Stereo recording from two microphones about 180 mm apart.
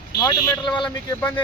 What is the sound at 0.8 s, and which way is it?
Speech, 10° left (ahead or behind).